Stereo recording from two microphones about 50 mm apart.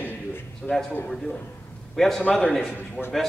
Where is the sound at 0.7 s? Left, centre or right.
Left.